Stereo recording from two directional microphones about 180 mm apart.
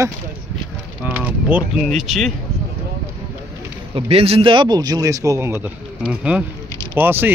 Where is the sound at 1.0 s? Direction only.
10° right (ahead or behind).